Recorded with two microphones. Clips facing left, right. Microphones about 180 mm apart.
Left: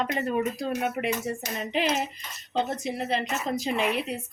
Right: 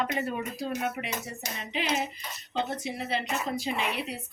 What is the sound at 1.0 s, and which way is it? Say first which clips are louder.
Speech: left 8 dB; 50° left (ahead or behind).